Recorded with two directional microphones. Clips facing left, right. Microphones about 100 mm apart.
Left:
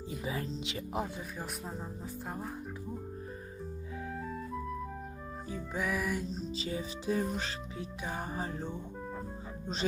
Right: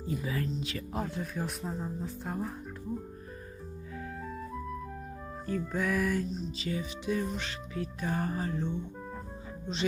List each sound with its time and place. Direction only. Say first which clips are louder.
0.2 s speech: right 3 dB; 25° left (ahead or behind)
1.0 s speech: right 5 dB; 5° left (ahead or behind)
5.5 s music: right 4 dB; 10° left (ahead or behind)
6.6 s music: right 2 dB; 30° left (ahead or behind)
7.8 s music: right 7 dB; 15° left (ahead or behind)
8.4 s music: right 4 dB; 35° left (ahead or behind)